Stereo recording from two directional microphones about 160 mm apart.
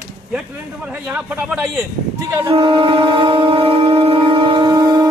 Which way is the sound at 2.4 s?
35° right (ahead or behind).